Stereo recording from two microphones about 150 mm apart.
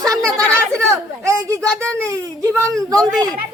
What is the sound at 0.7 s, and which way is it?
A child's voice, 20° right (ahead or behind).